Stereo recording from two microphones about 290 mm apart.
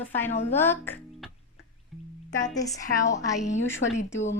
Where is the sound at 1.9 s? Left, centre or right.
Centre.